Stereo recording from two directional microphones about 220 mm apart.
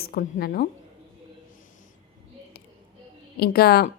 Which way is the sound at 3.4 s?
45° left (ahead or behind).